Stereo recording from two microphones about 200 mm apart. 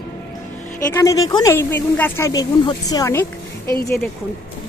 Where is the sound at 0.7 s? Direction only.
15° left (ahead or behind).